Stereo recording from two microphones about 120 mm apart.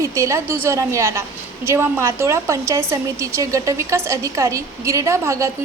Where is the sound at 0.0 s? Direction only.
25° right (ahead or behind).